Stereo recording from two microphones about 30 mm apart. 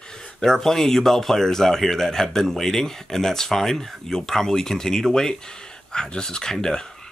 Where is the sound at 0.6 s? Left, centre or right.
Centre.